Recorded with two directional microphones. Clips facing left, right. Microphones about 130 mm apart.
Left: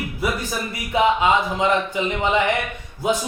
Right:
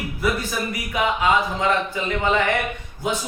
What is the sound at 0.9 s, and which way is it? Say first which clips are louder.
Speech: left 3 dB; 25° left (ahead or behind).